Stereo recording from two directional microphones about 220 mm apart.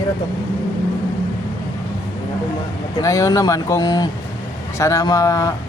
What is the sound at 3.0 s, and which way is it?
Speech, 15° left (ahead or behind).